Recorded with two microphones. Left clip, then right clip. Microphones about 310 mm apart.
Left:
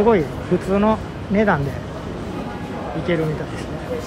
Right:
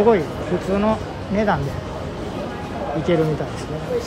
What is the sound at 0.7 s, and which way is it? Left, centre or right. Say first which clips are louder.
Speech: left 2 dB; centre.